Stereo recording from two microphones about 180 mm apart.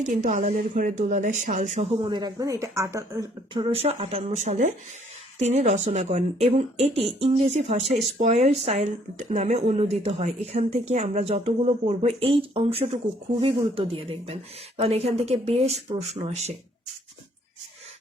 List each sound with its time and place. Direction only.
0.2 s speech: 45° right (ahead or behind)